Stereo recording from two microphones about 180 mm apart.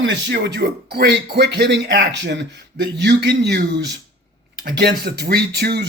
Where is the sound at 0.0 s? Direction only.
75° right (ahead or behind).